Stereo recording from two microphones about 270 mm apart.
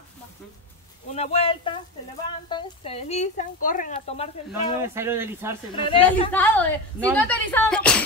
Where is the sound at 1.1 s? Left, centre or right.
Left.